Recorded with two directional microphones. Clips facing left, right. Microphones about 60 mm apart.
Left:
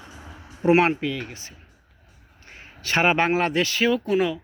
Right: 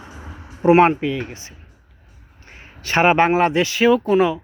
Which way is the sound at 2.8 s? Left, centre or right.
Right.